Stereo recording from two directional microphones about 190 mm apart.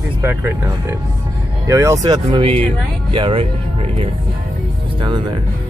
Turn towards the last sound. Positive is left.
turn(degrees=-25)  # may be behind; listen again after turning